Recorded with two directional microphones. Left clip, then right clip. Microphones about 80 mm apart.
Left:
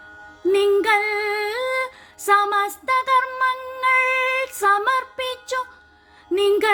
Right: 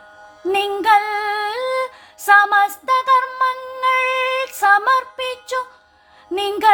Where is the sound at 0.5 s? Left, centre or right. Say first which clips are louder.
Right 3 dB; right.